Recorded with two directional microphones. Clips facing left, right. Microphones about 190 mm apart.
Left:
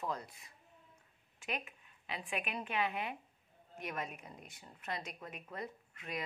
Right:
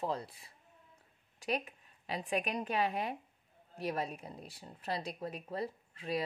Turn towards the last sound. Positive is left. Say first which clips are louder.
# right 7 dB
turn(degrees=-30)  # may be behind; listen again after turning